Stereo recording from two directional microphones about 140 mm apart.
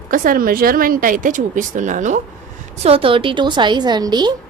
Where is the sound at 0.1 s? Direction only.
85° right; by 2.2 s 60° right (ahead or behind).